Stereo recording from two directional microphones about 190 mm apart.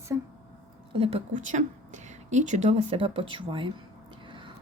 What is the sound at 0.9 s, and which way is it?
A woman's voice, 30° right (ahead or behind).